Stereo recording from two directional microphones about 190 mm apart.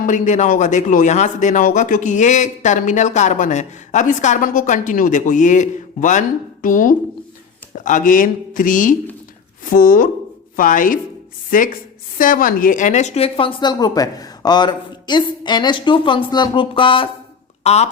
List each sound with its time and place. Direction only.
0.0 s speech: 40° left (ahead or behind)